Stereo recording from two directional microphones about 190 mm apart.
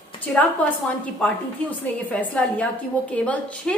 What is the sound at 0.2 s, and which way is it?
Speech, 10° left (ahead or behind).